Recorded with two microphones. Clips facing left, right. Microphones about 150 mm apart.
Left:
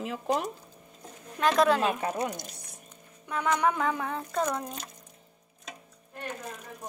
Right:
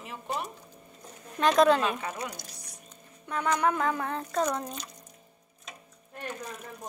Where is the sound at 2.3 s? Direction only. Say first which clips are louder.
Left 5 dB; 20° left (ahead or behind).